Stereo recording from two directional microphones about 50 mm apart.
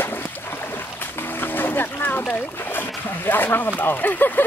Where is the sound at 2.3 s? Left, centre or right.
Left.